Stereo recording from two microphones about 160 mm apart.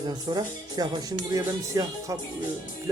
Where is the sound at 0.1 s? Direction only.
25° right (ahead or behind).